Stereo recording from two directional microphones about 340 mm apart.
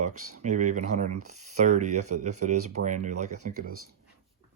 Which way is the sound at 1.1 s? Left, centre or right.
Right.